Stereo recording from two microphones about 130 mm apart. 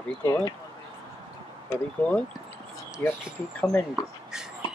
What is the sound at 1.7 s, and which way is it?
Speech, 10° left (ahead or behind).